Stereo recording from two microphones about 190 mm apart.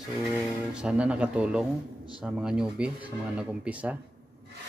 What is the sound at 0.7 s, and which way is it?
Speech, 5° right (ahead or behind).